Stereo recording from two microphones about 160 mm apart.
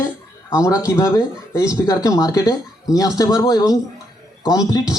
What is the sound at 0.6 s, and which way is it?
Speech, 20° left (ahead or behind).